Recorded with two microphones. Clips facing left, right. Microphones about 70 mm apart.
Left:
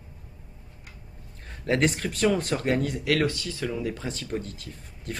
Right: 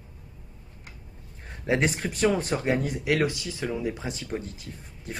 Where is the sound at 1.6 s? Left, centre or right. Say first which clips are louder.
Left 1 dB; centre.